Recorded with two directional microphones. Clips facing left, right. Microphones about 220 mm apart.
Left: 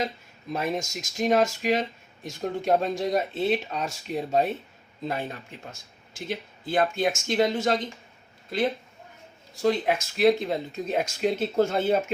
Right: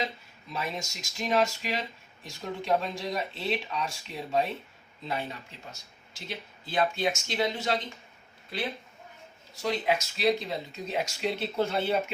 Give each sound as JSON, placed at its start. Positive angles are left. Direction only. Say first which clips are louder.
{"t": 0.5, "sound": "speech", "louder": "left 7 dB", "side_deg": 45}
{"t": 9.6, "sound": "speech", "louder": "left 5 dB", "side_deg": 50}